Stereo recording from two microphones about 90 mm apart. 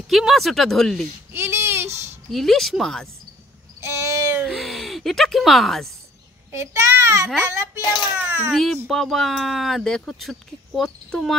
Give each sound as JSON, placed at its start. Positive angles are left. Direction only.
{"t": 0.1, "sound": "speech", "side_deg": 0}
{"t": 1.3, "sound": "a sound", "side_deg": -25}
{"t": 2.3, "sound": "speech", "side_deg": 0}
{"t": 3.8, "sound": "a sound", "side_deg": -35}
{"t": 4.5, "sound": "a sound", "side_deg": 0}
{"t": 6.5, "sound": "a child's voice", "side_deg": -35}
{"t": 7.8, "sound": "a child's voice", "side_deg": 50}
{"t": 8.2, "sound": "a child's voice", "side_deg": -30}
{"t": 8.8, "sound": "speech", "side_deg": 0}